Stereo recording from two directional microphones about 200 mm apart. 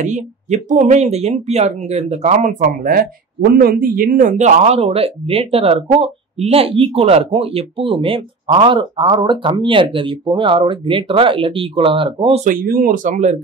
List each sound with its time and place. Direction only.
0.0 s speech: 35° right (ahead or behind)
12.4 s speech: 45° right (ahead or behind)